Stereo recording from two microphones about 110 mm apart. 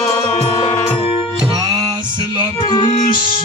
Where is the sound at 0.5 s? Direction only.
40° left (ahead or behind).